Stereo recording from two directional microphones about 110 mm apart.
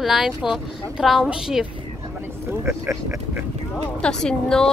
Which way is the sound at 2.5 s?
25° right (ahead or behind).